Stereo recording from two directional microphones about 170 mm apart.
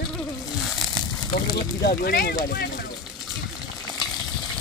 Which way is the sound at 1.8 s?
65° left (ahead or behind).